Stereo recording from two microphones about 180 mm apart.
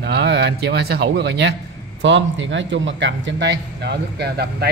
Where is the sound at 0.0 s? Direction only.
70° right (ahead or behind).